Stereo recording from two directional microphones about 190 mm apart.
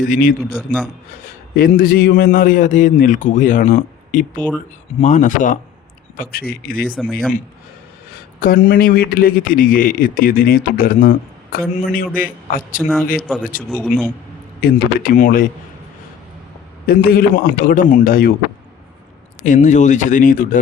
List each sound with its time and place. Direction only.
0.0 s a man's voice: 45° left (ahead or behind)
0.5 s a man's voice: 5° right (ahead or behind)
1.2 s a man's voice: 50° left (ahead or behind)
4.4 s speech: 10° left (ahead or behind)
4.9 s a man's voice: 40° left (ahead or behind)
8.4 s a man's voice: 50° left (ahead or behind)
13.1 s a man's voice: 5° right (ahead or behind)
14.6 s a man's voice: 45° left (ahead or behind)
16.8 s a man's voice: 50° left (ahead or behind)
19.5 s speech: 40° left (ahead or behind)